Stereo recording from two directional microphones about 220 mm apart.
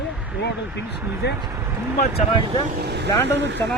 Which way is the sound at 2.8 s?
50° right (ahead or behind).